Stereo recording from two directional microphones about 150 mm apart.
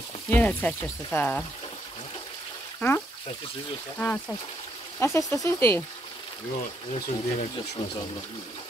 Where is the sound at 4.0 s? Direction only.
10° left (ahead or behind).